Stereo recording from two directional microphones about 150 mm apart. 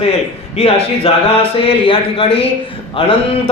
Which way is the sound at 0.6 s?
45° left (ahead or behind).